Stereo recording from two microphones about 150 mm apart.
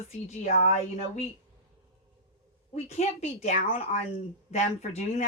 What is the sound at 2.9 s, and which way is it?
Speech, 45° left (ahead or behind).